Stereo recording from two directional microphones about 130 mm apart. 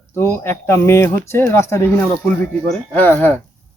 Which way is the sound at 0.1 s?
20° left (ahead or behind).